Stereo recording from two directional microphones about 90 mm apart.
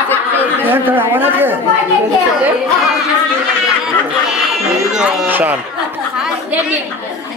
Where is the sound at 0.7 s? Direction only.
20° right (ahead or behind).